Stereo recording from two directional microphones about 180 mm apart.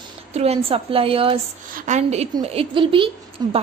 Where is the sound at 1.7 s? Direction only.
40° right (ahead or behind); by 3.5 s 25° right (ahead or behind).